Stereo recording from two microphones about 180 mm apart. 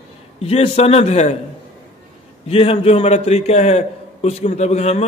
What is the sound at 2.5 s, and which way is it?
A man's voice, 35° left (ahead or behind).